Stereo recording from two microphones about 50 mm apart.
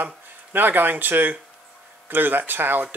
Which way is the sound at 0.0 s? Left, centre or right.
Right.